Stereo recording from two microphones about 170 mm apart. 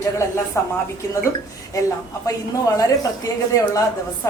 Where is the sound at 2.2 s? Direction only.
20° left (ahead or behind).